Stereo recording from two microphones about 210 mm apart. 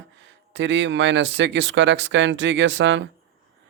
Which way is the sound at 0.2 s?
60° right (ahead or behind).